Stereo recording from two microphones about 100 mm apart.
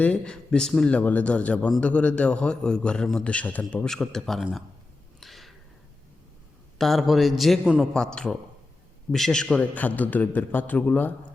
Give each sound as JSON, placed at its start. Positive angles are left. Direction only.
{"t": 0.0, "sound": "a man's voice", "side_deg": 10}
{"t": 5.2, "sound": "a sound", "side_deg": 0}
{"t": 6.7, "sound": "a man's voice", "side_deg": 0}